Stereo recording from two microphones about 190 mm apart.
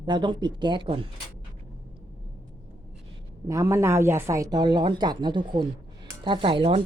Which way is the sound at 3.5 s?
15° right (ahead or behind).